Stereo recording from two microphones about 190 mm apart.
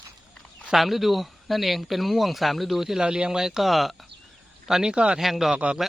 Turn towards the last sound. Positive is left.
turn(degrees=-5)  # may be behind; listen again after turning